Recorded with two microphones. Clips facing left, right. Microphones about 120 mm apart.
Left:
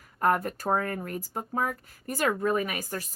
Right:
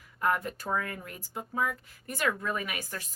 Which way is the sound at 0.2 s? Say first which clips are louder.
Left 4 dB; 45° left (ahead or behind).